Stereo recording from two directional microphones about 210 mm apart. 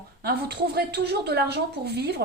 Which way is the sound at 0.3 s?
50° right (ahead or behind).